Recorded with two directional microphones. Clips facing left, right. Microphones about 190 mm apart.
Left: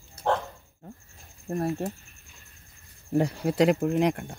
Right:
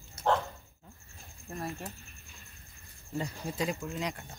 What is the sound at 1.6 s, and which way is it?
Speech, 35° left (ahead or behind).